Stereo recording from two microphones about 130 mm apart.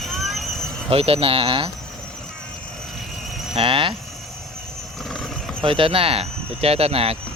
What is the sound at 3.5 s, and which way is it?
Speech, 45° right (ahead or behind).